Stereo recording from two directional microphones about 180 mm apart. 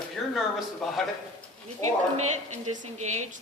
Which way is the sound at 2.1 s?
40° right (ahead or behind).